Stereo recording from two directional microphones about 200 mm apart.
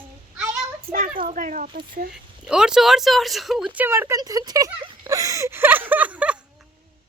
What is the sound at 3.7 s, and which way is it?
Speech, 10° right (ahead or behind).